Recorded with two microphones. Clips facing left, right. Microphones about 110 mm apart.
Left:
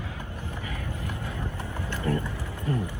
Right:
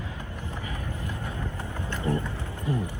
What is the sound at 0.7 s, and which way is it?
Vehicle, 20° right (ahead or behind).